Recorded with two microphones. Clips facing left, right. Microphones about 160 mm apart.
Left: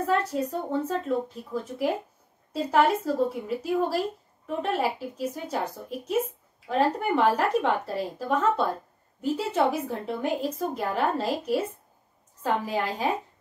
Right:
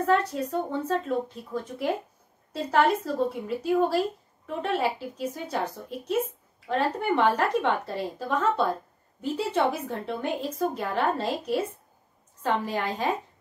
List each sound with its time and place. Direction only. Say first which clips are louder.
0.0 s a woman's voice: right 1 dB; 10° left (ahead or behind)
10.5 s a woman's voice: right 2 dB; 30° left (ahead or behind)
10.8 s a woman's voice: even; 5° left (ahead or behind)